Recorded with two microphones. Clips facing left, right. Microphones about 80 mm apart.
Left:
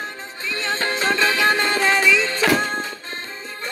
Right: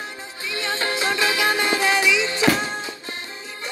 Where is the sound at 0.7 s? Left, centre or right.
Left.